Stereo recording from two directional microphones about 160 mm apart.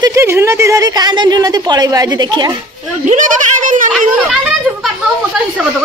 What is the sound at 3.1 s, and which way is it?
Speech, 55° right (ahead or behind).